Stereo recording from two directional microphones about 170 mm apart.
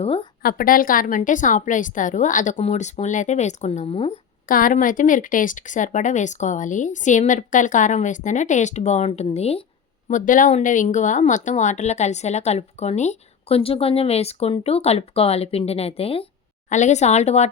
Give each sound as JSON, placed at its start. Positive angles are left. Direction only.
{"t": 0.0, "sound": "speech", "side_deg": 35}
{"t": 0.4, "sound": "speech", "side_deg": 55}
{"t": 4.4, "sound": "speech", "side_deg": 55}
{"t": 10.1, "sound": "speech", "side_deg": 50}